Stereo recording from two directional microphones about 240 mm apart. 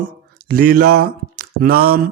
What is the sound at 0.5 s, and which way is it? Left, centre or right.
A man's voice, right.